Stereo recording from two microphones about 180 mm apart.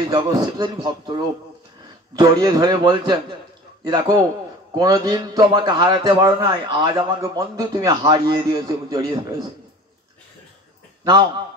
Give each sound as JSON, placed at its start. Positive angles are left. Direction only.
{"t": 0.1, "sound": "a man's voice", "side_deg": -20}